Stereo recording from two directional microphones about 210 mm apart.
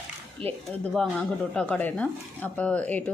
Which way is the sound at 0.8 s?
5° left (ahead or behind).